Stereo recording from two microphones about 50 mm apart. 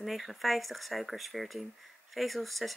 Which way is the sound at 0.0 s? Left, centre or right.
Centre.